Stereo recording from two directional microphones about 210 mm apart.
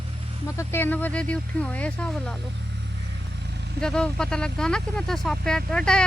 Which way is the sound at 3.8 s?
5° left (ahead or behind).